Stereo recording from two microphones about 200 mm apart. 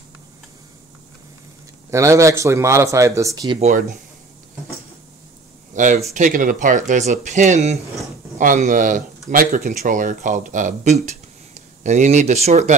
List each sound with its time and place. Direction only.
1.9 s speech: 15° right (ahead or behind)
3.5 s speech: 35° right (ahead or behind)
5.7 s speech: 40° right (ahead or behind)